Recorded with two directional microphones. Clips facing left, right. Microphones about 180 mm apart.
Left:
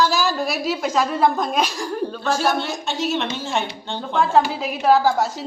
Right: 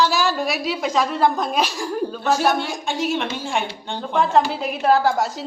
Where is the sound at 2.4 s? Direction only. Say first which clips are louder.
Right 1 dB; 15° right (ahead or behind).